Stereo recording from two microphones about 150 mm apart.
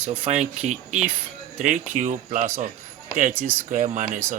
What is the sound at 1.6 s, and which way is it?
Speech, 55° right (ahead or behind).